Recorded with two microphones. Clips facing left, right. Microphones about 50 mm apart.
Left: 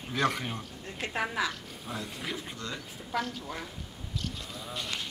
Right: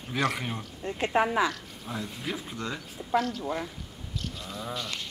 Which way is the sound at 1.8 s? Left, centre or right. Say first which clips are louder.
Right 2 dB; centre.